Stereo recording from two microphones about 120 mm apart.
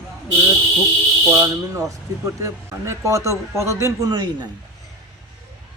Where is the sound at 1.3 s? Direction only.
25° right (ahead or behind).